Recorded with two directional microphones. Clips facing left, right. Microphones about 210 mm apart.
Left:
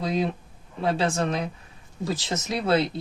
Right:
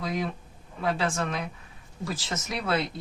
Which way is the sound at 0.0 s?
30° left (ahead or behind).